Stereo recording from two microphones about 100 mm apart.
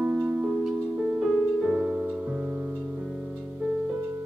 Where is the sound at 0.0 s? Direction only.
15° right (ahead or behind).